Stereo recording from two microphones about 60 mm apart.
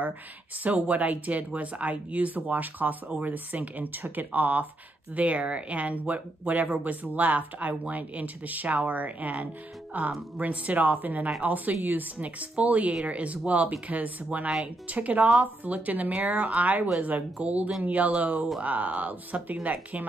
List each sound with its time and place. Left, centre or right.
0.7 s speech: right